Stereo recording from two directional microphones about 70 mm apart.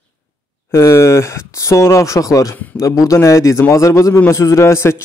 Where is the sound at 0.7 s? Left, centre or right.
Left.